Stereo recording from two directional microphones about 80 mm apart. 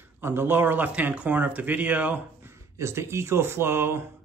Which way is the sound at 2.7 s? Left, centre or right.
Right.